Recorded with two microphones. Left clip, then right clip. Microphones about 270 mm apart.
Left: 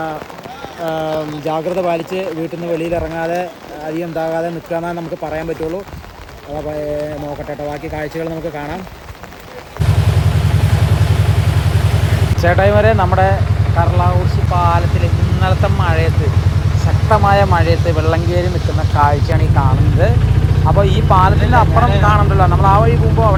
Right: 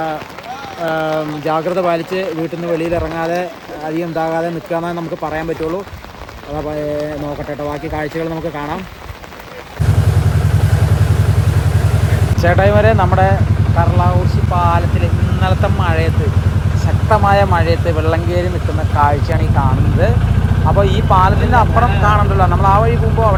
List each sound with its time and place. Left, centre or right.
0.9 s speech: centre
2.9 s speech: centre
12.4 s speech: centre